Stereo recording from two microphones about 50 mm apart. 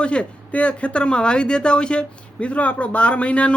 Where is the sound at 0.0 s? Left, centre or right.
Left.